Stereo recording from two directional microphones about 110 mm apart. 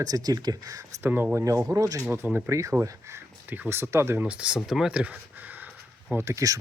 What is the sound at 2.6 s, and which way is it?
Speech, 30° right (ahead or behind).